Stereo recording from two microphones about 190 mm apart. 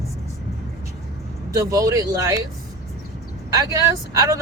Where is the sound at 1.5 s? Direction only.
15° right (ahead or behind).